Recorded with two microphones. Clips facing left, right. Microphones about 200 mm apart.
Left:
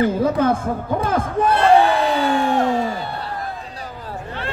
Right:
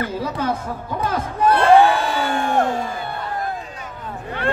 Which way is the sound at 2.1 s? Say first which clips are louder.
Left 2 dB; 50° right (ahead or behind).